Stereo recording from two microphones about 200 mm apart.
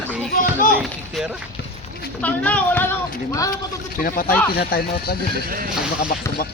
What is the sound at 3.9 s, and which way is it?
Speech, 45° left (ahead or behind).